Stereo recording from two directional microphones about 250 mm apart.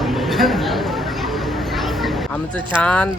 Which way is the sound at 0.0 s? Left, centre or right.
Centre.